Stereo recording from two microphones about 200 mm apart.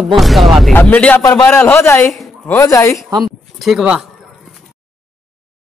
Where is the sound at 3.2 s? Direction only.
Centre (ahead or behind).